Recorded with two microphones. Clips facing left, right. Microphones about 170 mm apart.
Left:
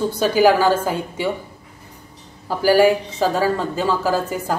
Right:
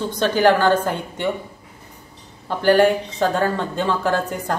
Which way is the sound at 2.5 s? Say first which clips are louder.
Left 1 dB; 5° left (ahead or behind).